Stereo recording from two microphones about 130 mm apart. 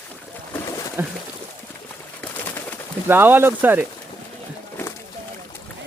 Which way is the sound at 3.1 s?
15° right (ahead or behind).